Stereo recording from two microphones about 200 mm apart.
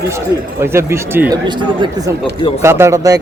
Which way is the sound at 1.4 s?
20° right (ahead or behind).